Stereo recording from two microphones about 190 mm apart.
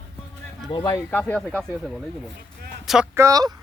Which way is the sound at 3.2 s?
20° right (ahead or behind).